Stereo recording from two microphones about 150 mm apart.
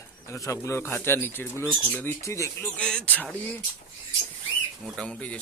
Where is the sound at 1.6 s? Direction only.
5° left (ahead or behind).